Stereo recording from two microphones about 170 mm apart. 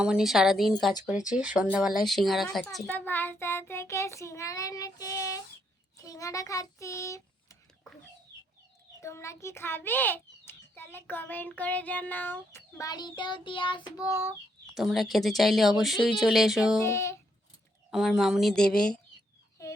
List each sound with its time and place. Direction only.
0.0 s a child's voice: 5° right (ahead or behind); by 7.5 s 20° left (ahead or behind)
9.0 s a child's voice: 15° left (ahead or behind)
14.8 s speech: centre (ahead or behind)
16.8 s a child's voice: 15° left (ahead or behind)
17.9 s speech: centre (ahead or behind)